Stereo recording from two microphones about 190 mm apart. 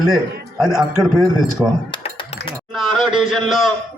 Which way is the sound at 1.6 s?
15° right (ahead or behind).